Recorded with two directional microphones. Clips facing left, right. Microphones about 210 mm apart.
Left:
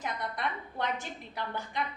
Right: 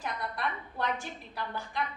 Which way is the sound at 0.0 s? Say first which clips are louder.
Even; 20° left (ahead or behind).